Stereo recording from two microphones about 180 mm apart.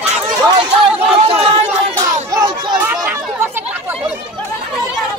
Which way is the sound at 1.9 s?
20° right (ahead or behind).